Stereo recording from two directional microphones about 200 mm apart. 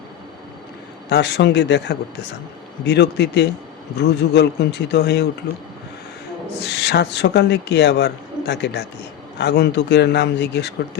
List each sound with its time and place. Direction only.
1.1 s a man's voice: 60° left (ahead or behind)
6.6 s a man's voice: 55° left (ahead or behind)